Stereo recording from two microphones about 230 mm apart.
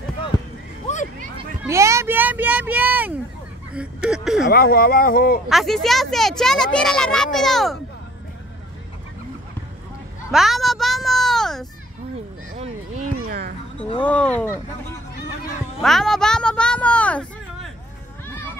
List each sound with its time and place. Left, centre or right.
0.9 s a sound: left
1.6 s a child's voice: centre
4.5 s speech: left
5.5 s a child's voice: centre
10.3 s a sound: centre
12.5 s speech: right
13.7 s speech: left
14.0 s speech: centre
15.8 s a child's voice: centre